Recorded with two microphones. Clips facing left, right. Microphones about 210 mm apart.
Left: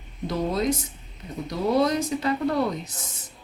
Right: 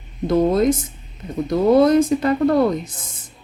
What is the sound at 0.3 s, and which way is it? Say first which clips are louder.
Speech: right 9 dB; 50° right (ahead or behind).